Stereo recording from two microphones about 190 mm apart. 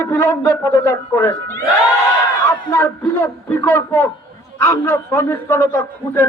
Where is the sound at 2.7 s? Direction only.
15° left (ahead or behind).